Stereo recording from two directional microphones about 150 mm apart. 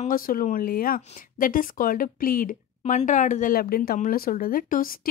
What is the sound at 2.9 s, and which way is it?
Speech, 55° left (ahead or behind).